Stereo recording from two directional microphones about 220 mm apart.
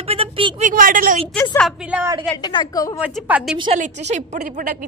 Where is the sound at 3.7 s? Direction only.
35° right (ahead or behind).